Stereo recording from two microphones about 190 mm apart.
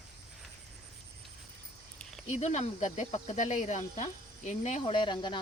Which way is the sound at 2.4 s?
35° left (ahead or behind).